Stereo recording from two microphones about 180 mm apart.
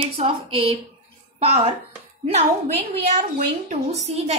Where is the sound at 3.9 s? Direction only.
40° right (ahead or behind).